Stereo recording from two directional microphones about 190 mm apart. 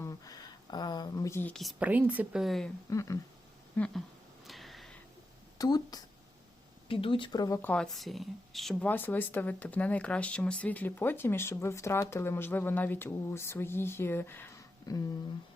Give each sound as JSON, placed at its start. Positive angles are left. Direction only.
{"t": 0.0, "sound": "speech", "side_deg": 20}
{"t": 2.9, "sound": "speech", "side_deg": 15}
{"t": 3.8, "sound": "speech", "side_deg": 5}
{"t": 4.4, "sound": "a sound", "side_deg": 0}
{"t": 5.5, "sound": "speech", "side_deg": 20}